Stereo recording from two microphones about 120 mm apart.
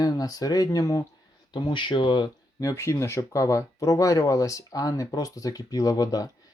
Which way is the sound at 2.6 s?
25° left (ahead or behind).